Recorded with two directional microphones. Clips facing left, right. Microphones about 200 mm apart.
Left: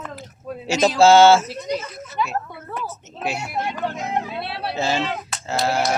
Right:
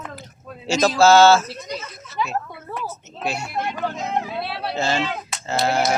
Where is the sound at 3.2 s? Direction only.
15° left (ahead or behind).